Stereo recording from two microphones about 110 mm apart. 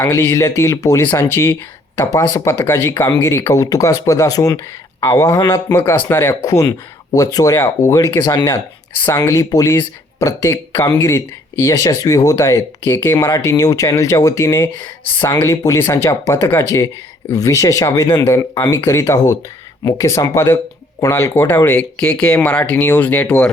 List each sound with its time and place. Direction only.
0.0 s speech: 25° left (ahead or behind)
6.4 s speech: 35° left (ahead or behind)
8.3 s speech: 40° left (ahead or behind); by 13.1 s 20° left (ahead or behind)
13.1 s speech: 35° left (ahead or behind)
18.8 s speech: 25° left (ahead or behind)